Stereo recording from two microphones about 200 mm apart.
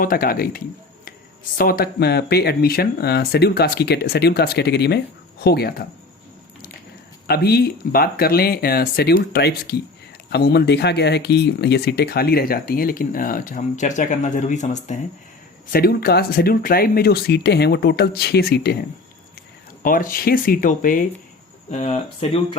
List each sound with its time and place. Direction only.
0.0 s speech: 45° left (ahead or behind)
7.3 s speech: 50° left (ahead or behind); by 14.9 s 35° left (ahead or behind)
15.7 s speech: 50° left (ahead or behind)
19.8 s speech: 45° left (ahead or behind)
21.7 s speech: 35° left (ahead or behind)